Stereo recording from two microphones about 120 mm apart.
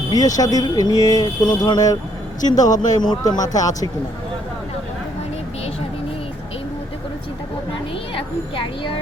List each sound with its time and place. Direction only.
0.1 s speech: 30° left (ahead or behind)